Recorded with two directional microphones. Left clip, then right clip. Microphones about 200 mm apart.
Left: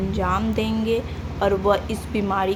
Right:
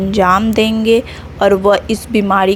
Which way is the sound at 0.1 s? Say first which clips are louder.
Right 14 dB; 40° right (ahead or behind).